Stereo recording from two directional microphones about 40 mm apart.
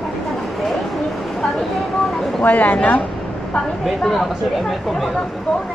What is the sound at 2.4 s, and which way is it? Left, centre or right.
Speech, left.